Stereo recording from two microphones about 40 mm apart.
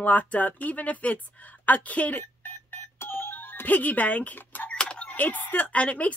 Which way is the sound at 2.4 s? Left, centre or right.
Left.